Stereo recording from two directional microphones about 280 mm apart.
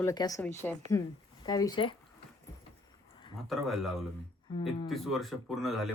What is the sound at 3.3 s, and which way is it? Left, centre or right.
Speech, centre.